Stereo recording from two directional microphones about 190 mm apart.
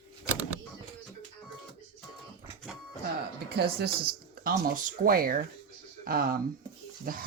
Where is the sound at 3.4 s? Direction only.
55° right (ahead or behind).